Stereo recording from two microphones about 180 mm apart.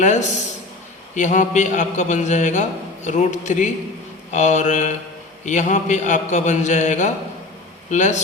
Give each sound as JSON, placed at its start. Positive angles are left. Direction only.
{"t": 0.0, "sound": "a man's voice", "side_deg": 40}